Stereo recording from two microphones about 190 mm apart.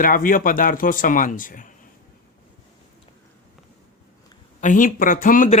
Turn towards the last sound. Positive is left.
turn(degrees=45)  # may be behind; listen again after turning